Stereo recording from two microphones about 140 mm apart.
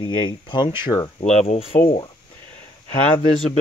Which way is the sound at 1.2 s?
50° left (ahead or behind).